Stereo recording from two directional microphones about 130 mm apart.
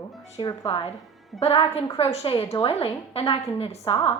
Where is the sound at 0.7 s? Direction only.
50° left (ahead or behind).